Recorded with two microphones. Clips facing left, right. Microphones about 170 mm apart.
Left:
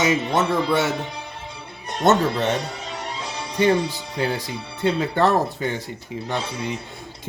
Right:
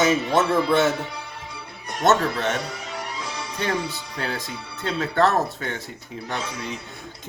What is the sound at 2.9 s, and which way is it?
Music, 25° left (ahead or behind).